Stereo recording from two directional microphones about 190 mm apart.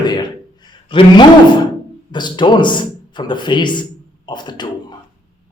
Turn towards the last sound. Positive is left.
turn(degrees=25)  # may be behind; listen again after turning